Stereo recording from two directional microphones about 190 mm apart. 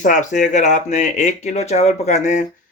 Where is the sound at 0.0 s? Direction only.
40° left (ahead or behind).